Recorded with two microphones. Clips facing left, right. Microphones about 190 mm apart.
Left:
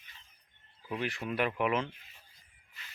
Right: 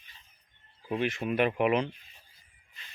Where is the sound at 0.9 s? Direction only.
20° right (ahead or behind).